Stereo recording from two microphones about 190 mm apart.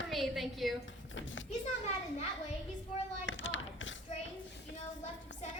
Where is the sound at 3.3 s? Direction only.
85° left.